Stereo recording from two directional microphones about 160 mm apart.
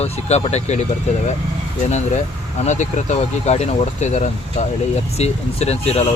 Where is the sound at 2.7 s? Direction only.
45° left (ahead or behind).